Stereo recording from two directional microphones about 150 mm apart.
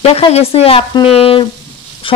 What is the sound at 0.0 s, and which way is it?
Speech, 40° left (ahead or behind).